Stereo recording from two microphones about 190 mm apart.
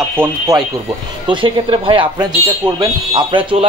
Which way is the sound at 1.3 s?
25° right (ahead or behind).